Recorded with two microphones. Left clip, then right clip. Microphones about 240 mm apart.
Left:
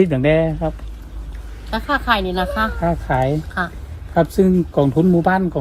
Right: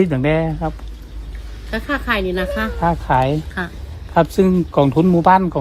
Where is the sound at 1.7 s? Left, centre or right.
Centre.